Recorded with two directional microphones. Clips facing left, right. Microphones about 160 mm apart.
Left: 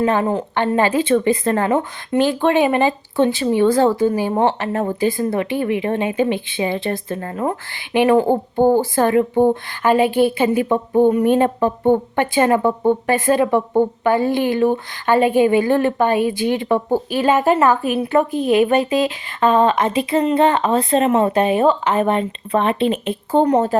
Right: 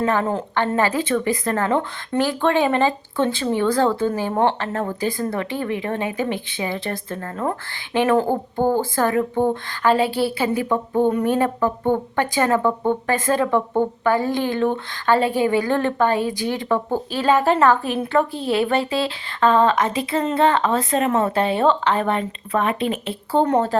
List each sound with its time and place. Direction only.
0.0 s speech: 15° left (ahead or behind)